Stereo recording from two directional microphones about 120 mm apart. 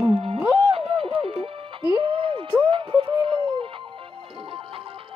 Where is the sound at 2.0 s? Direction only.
45° right (ahead or behind).